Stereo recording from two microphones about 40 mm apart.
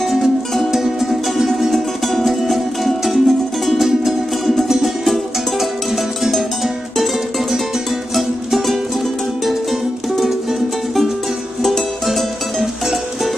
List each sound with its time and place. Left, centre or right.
0.1 s music: centre
1.7 s music: centre
8.1 s music: centre
11.6 s music: centre